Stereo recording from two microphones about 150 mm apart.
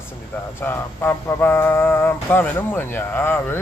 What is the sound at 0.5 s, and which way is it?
Speech, 15° left (ahead or behind).